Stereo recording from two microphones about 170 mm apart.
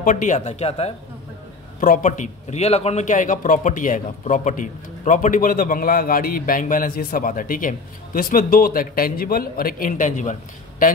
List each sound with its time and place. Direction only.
0.0 s speech: 50° left (ahead or behind)
1.8 s a man's voice: 50° left (ahead or behind)